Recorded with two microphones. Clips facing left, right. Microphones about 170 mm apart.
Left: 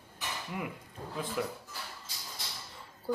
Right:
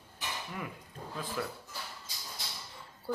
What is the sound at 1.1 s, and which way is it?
Speech, 20° left (ahead or behind).